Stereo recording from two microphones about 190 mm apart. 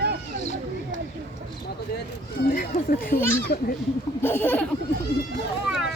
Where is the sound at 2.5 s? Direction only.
50° left (ahead or behind).